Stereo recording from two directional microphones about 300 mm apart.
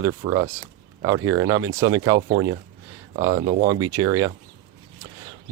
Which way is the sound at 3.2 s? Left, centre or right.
Centre.